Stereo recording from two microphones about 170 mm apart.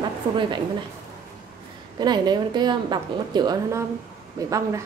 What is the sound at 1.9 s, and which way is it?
A woman's voice, 25° right (ahead or behind).